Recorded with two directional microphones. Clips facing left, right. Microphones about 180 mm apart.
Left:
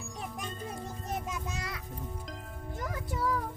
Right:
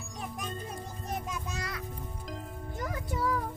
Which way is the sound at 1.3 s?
20° left (ahead or behind).